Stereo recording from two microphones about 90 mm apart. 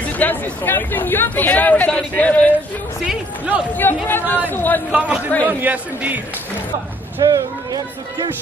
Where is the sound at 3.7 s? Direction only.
20° left (ahead or behind).